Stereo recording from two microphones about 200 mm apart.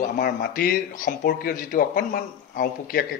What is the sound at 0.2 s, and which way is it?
Speech, 45° left (ahead or behind).